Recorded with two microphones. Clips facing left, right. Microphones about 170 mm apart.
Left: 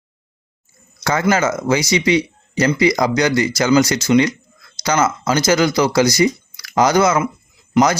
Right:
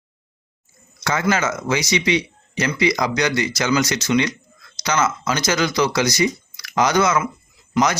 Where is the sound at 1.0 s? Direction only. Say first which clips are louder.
Left 4 dB; 35° left (ahead or behind).